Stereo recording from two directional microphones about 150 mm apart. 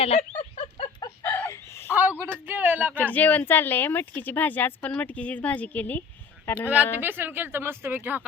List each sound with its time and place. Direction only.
0.0 s a sound: 50° left (ahead or behind)
0.8 s chicken: 30° left (ahead or behind)
1.2 s chicken: 15° left (ahead or behind)
2.2 s speech: 15° right (ahead or behind)
2.9 s speech: 10° left (ahead or behind)
7.0 s speech: 15° right (ahead or behind)